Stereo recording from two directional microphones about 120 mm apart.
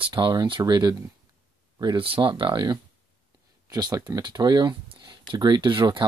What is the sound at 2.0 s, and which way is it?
Speech, 45° right (ahead or behind).